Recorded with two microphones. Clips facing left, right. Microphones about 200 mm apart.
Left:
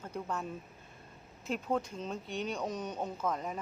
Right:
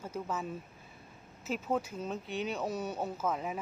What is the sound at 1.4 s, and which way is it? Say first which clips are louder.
Speech: even; 5° right (ahead or behind).